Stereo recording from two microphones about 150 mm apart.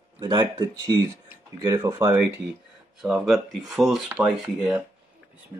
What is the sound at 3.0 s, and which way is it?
Speech, 5° right (ahead or behind).